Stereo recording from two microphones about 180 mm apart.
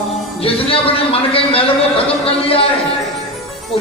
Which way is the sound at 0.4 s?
30° left (ahead or behind).